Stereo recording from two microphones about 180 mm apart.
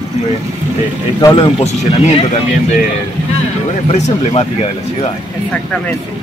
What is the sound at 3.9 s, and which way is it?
Speech, 40° left (ahead or behind).